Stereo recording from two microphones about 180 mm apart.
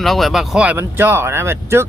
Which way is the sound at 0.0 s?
Centre (ahead or behind).